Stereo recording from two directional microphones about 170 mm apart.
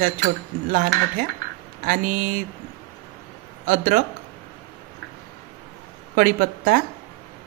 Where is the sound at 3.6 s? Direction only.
60° right (ahead or behind).